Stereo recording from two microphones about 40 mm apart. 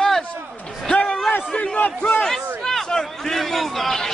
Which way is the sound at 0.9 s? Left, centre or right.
Left.